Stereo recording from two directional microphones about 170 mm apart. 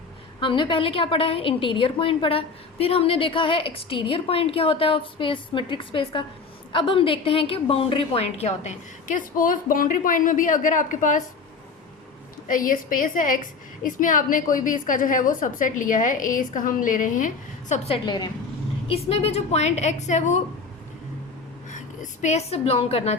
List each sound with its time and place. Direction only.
0.3 s a woman's voice: 30° left (ahead or behind); by 11.2 s 50° left (ahead or behind)
12.5 s a woman's voice: 50° left (ahead or behind)
18.0 s a woman's voice: 25° left (ahead or behind); by 20.4 s 45° left (ahead or behind)
21.7 s a woman's voice: 45° left (ahead or behind)